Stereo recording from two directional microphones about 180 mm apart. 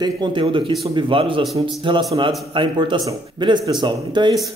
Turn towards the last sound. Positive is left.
turn(degrees=-25)  # may be behind; listen again after turning